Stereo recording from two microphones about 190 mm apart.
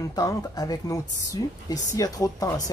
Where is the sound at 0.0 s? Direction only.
20° left (ahead or behind).